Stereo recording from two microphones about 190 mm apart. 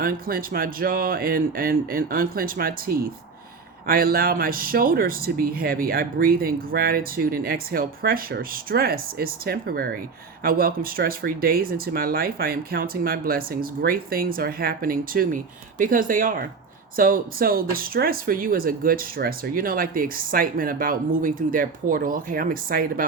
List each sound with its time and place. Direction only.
0.0 s speech: 50° right (ahead or behind)